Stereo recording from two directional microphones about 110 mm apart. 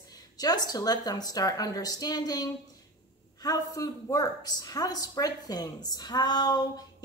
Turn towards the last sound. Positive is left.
turn(degrees=35)  # may be behind; listen again after turning